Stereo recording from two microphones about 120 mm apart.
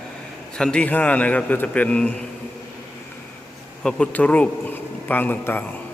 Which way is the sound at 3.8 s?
10° left (ahead or behind).